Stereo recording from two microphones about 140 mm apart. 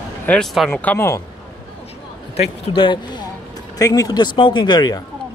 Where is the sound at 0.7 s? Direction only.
10° left (ahead or behind).